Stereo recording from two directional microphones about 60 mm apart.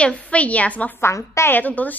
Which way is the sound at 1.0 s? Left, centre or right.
Left.